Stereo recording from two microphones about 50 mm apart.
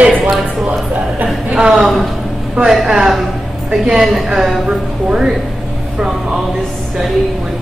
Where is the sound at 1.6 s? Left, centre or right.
Centre.